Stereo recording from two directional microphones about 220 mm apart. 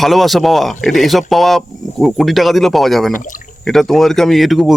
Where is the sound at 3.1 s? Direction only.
35° left (ahead or behind).